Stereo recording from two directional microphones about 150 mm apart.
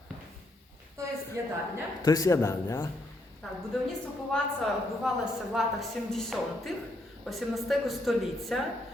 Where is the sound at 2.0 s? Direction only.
25° left (ahead or behind).